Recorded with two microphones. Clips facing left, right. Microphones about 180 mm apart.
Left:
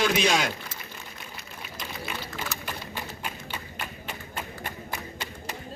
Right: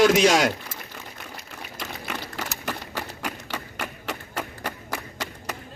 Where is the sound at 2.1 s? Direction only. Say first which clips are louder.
Right 3 dB; 75° right (ahead or behind).